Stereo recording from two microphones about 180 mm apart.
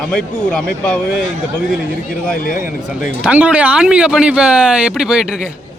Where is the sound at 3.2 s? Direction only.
5° right (ahead or behind).